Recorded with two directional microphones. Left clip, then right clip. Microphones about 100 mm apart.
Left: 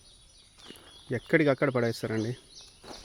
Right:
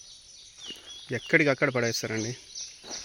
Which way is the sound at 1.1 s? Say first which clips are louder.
Even; 40° left (ahead or behind).